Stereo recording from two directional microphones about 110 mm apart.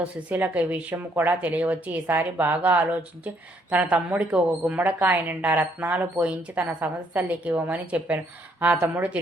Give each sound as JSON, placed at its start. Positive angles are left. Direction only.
{"t": 0.3, "sound": "speech", "side_deg": -15}